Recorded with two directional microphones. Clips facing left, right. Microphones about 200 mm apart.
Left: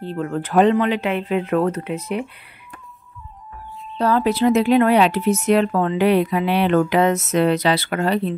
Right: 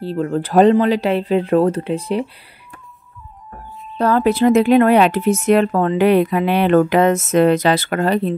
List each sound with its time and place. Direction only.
0.0 s speech: 35° right (ahead or behind)
4.0 s speech: 50° right (ahead or behind)